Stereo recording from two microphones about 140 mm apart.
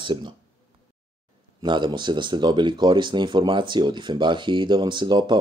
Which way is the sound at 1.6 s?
30° right (ahead or behind).